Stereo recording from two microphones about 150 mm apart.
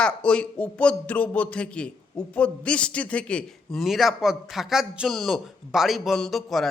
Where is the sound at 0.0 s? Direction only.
5° left (ahead or behind).